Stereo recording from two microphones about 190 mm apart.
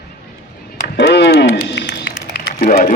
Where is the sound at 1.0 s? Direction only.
65° left (ahead or behind).